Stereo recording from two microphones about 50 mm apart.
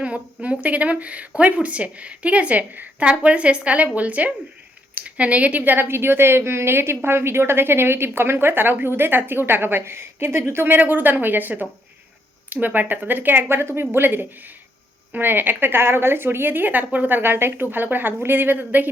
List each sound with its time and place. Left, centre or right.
0.0 s a woman's voice: right
10.8 s speech: right